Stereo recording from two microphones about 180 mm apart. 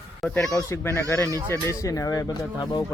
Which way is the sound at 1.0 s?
5° left (ahead or behind).